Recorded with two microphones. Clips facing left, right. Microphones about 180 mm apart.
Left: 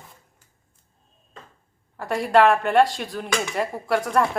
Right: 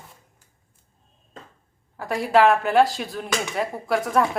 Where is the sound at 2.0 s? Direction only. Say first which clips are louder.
Left 1 dB; centre (ahead or behind).